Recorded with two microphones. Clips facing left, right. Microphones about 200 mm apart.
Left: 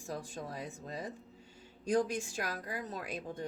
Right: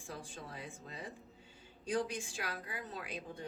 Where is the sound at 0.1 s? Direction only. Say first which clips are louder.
Left 6 dB; 40° left (ahead or behind).